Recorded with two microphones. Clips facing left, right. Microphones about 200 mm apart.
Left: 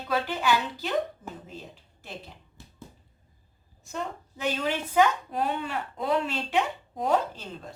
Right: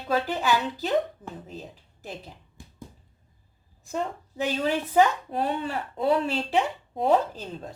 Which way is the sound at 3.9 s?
35° right (ahead or behind).